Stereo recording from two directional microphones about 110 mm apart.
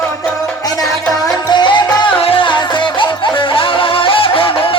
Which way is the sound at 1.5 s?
45° left (ahead or behind).